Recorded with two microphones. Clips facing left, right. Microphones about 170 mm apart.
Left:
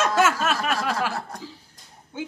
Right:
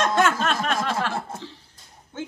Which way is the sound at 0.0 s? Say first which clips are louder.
Even; 5° left (ahead or behind).